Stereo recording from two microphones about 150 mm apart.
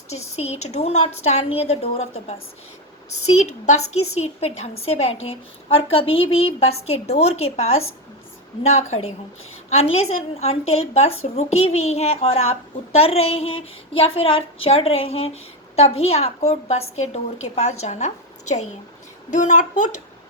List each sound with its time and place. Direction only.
0.1 s a woman's voice: 45° left (ahead or behind)
3.7 s a woman's voice: 45° left (ahead or behind)